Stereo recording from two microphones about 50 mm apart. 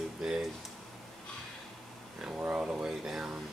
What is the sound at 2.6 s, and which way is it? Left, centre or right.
Speech, centre.